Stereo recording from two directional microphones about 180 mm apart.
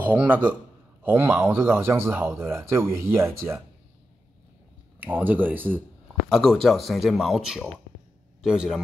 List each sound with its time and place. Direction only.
0.0 s speech: 10° right (ahead or behind)
5.0 s speech: 10° right (ahead or behind)
6.3 s a man's voice: centre (ahead or behind)